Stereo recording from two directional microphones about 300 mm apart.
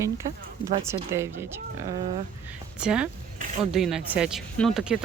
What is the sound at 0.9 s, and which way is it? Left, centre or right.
Speech, centre.